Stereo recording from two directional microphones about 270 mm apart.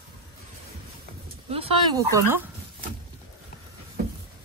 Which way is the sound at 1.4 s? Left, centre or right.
Centre.